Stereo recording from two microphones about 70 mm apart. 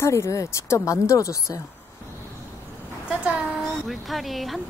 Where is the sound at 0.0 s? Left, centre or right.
Left.